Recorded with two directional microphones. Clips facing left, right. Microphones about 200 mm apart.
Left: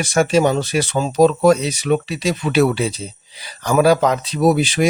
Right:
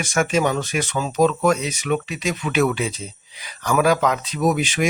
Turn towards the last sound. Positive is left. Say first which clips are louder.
# left 5 dB
turn(degrees=35)  # may be behind; listen again after turning